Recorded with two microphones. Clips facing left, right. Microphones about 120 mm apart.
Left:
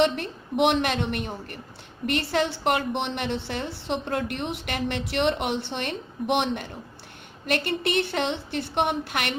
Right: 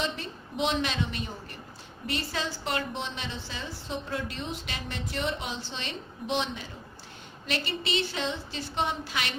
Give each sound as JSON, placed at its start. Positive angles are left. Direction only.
{"t": 0.0, "sound": "a woman's voice", "side_deg": 65}